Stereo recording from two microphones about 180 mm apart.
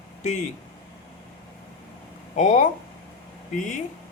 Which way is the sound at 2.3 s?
45° left (ahead or behind).